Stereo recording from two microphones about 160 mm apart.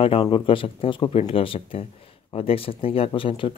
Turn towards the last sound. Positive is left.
turn(degrees=35)  # may be behind; listen again after turning